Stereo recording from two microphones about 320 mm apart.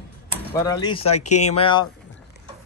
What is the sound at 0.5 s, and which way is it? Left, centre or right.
Speech, centre.